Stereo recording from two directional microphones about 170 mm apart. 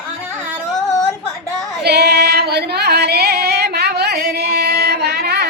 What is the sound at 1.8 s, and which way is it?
Female singing, 70° right (ahead or behind).